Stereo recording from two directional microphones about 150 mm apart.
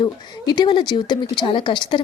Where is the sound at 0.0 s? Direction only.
30° left (ahead or behind).